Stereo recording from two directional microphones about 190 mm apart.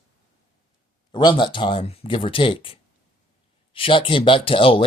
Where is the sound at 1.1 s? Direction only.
25° left (ahead or behind).